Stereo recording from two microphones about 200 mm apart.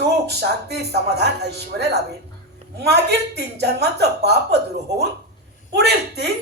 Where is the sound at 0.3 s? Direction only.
55° right (ahead or behind).